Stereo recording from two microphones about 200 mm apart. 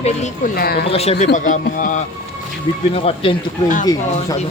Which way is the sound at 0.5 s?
50° left (ahead or behind).